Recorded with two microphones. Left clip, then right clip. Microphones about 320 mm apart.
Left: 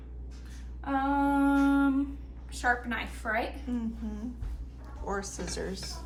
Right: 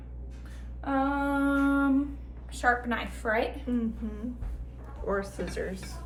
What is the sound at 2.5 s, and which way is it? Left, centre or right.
Speech, centre.